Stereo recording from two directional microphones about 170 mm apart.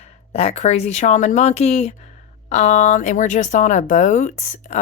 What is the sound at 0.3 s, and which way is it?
Speech, 40° left (ahead or behind).